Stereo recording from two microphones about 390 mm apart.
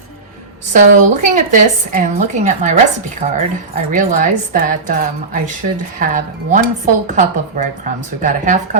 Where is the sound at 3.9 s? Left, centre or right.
Right.